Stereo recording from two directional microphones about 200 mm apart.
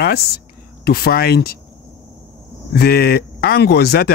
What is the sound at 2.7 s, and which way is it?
Speech, 50° left (ahead or behind).